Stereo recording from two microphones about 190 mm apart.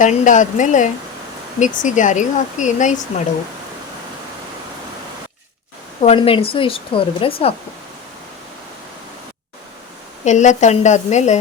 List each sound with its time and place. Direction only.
0.0 s speech: 40° left (ahead or behind)
6.0 s speech: 30° left (ahead or behind)
10.2 s speech: 40° left (ahead or behind)